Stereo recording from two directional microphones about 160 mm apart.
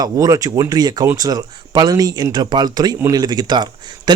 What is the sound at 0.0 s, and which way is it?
A man's voice, 20° right (ahead or behind).